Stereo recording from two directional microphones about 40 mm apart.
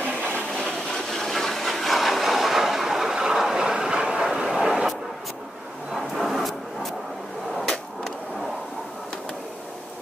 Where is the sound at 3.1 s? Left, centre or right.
Centre.